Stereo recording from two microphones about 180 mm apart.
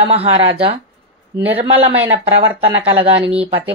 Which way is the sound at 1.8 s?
30° right (ahead or behind).